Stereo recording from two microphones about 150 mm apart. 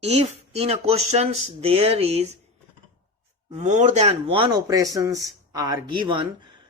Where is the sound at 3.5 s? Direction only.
50° right (ahead or behind).